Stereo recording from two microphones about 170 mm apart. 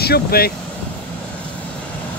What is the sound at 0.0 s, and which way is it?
Speech, 65° left (ahead or behind).